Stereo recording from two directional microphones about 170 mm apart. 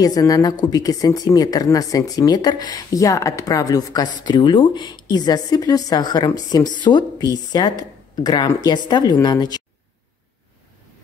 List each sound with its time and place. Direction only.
0.0 s speech: 20° left (ahead or behind)